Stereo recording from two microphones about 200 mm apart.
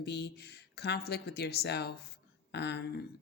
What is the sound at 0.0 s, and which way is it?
Speech, 55° left (ahead or behind).